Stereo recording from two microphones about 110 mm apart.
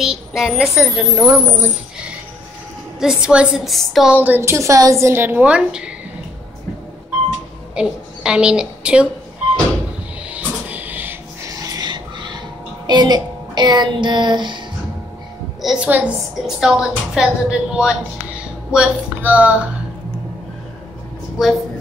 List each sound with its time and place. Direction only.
0.0 s a woman's voice: 5° right (ahead or behind)
1.1 s a woman's voice: 20° right (ahead or behind)
3.0 s a woman's voice: 5° right (ahead or behind)
4.1 s a woman's voice: 15° right (ahead or behind)
7.7 s a woman's voice: 5° right (ahead or behind)
10.3 s a sound: 15° right (ahead or behind)
11.7 s a sound: 40° right (ahead or behind)
12.8 s a child's voice: 40° right (ahead or behind)
15.6 s a woman's voice: 5° right (ahead or behind)